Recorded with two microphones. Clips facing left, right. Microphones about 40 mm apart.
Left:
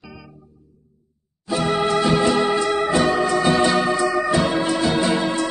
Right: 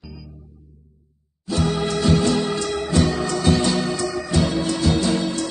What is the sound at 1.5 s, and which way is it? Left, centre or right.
Organ, centre.